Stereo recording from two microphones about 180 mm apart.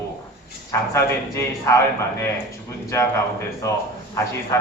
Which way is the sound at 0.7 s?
15° left (ahead or behind).